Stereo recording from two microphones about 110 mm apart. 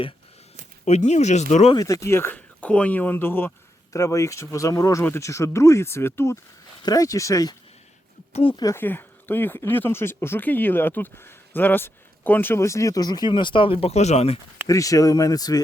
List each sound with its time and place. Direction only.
0.9 s speech: 85° left
1.7 s speech: 30° left (ahead or behind)
3.9 s speech: 30° left (ahead or behind)
6.8 s speech: 35° left (ahead or behind)
8.3 s speech: 65° left (ahead or behind)
8.7 s speech: 20° left (ahead or behind); by 14.3 s 80° left
14.7 s speech: 30° left (ahead or behind)